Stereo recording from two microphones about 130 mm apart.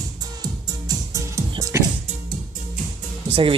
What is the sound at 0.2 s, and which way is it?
Music, 30° right (ahead or behind).